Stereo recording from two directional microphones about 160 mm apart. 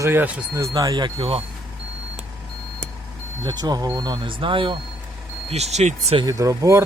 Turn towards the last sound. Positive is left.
turn(degrees=-20)  # may be behind; listen again after turning